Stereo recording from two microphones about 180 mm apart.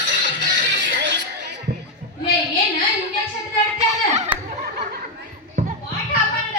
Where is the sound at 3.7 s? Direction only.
40° right (ahead or behind).